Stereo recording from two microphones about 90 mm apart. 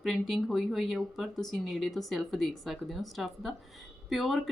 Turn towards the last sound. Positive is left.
turn(degrees=0)  # may be behind; listen again after turning